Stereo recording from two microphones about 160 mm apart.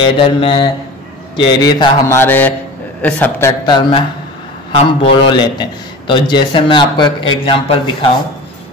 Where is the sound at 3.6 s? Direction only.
30° left (ahead or behind).